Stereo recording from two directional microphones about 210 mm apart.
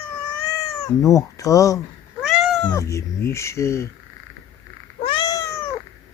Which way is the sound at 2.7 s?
15° left (ahead or behind).